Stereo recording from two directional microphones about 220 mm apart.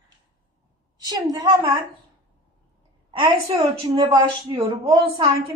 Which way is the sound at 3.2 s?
20° right (ahead or behind).